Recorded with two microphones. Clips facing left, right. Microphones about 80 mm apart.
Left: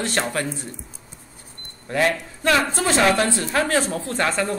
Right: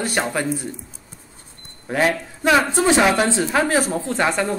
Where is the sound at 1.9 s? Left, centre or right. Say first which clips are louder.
Right 1 dB; centre.